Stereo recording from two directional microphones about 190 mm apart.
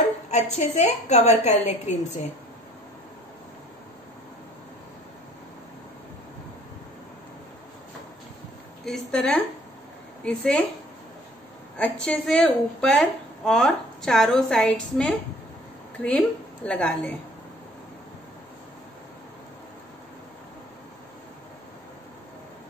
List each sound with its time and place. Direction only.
0.3 s a woman's voice: 35° left (ahead or behind)
8.8 s a woman's voice: 5° left (ahead or behind)
11.7 s a woman's voice: 5° left (ahead or behind)